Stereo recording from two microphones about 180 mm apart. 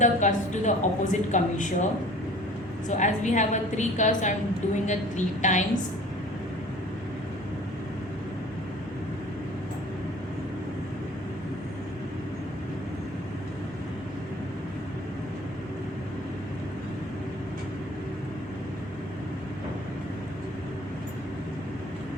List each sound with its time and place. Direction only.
0.0 s a woman's voice: 45° left (ahead or behind)
2.9 s a woman's voice: 40° left (ahead or behind)